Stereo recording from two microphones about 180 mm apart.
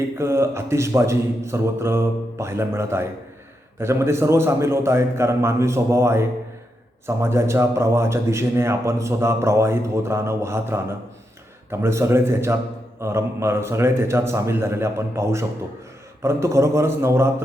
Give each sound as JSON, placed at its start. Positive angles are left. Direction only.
{"t": 0.2, "sound": "speech", "side_deg": -15}